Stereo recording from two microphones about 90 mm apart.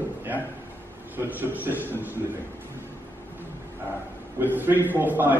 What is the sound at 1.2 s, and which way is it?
Speech, 20° right (ahead or behind).